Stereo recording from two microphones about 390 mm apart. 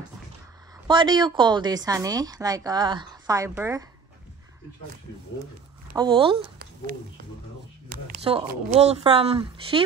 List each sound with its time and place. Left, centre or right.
0.8 s a woman's voice: centre
5.9 s a woman's voice: centre
6.3 s a sound: right
8.2 s a woman's voice: centre